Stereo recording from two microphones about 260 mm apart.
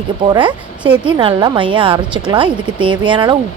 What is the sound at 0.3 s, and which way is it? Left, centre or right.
A woman's voice, centre.